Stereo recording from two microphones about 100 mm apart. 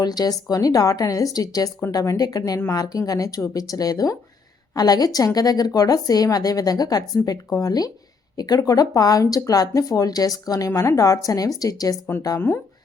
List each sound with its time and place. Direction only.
0.0 s a woman's voice: 40° left (ahead or behind)